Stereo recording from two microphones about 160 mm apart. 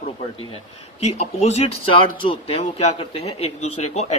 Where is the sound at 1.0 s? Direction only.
40° left (ahead or behind).